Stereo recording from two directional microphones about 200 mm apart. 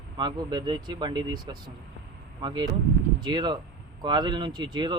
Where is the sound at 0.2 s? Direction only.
20° right (ahead or behind).